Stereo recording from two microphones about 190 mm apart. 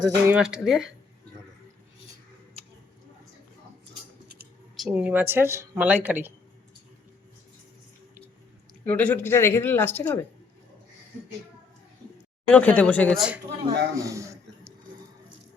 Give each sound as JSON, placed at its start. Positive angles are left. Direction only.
{"t": 0.0, "sound": "speech", "side_deg": -10}
{"t": 4.8, "sound": "speech", "side_deg": -5}
{"t": 8.8, "sound": "speech", "side_deg": 5}
{"t": 12.5, "sound": "speech", "side_deg": 5}
{"t": 13.9, "sound": "a sound", "side_deg": -15}